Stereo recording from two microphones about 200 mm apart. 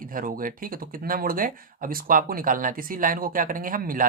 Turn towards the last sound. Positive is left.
turn(degrees=-45)  # may be behind; listen again after turning